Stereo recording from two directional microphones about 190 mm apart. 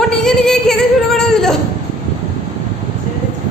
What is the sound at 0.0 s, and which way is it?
Singing, 5° left (ahead or behind).